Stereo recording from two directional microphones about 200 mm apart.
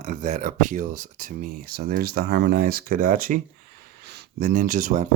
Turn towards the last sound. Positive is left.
turn(degrees=-40)  # may be behind; listen again after turning